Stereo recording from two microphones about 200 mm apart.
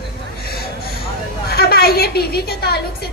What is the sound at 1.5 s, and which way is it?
A woman's voice, 50° left (ahead or behind).